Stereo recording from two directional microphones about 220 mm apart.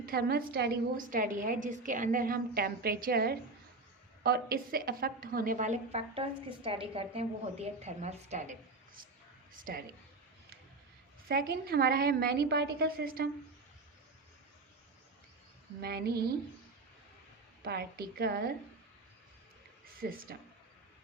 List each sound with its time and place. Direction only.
0.0 s a woman's voice: 45° right (ahead or behind)
9.6 s a woman's voice: 40° right (ahead or behind)
11.3 s a woman's voice: 45° right (ahead or behind)
15.8 s a woman's voice: 45° right (ahead or behind)
17.6 s a woman's voice: 45° right (ahead or behind)
20.0 s a woman's voice: 40° right (ahead or behind)